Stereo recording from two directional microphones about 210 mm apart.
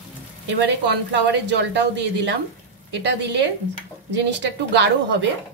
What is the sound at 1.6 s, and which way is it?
A woman's voice, 55° right (ahead or behind).